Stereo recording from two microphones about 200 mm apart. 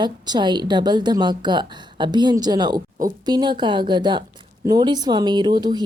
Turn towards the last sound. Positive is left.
turn(degrees=-20)  # may be behind; listen again after turning